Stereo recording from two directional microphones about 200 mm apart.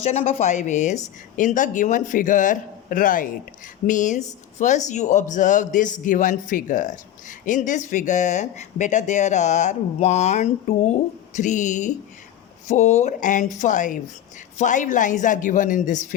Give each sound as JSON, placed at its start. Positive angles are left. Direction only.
{"t": 0.1, "sound": "speech", "side_deg": 35}